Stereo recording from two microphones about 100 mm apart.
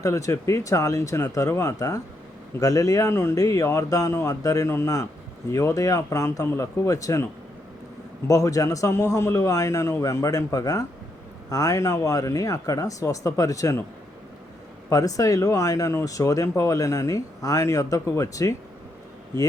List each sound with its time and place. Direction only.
0.0 s speech: 35° left (ahead or behind)
8.3 s speech: 35° left (ahead or behind)
14.8 s speech: 35° left (ahead or behind)